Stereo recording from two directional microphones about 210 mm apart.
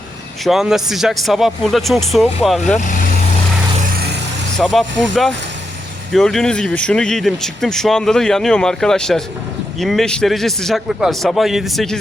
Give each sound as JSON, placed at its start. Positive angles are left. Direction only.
{"t": 0.4, "sound": "speech", "side_deg": 0}
{"t": 2.7, "sound": "speech", "side_deg": 35}
{"t": 4.5, "sound": "speech", "side_deg": 0}